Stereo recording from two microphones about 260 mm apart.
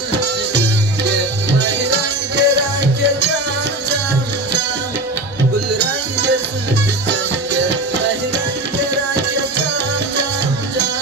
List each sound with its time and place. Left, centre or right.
1.0 s music: right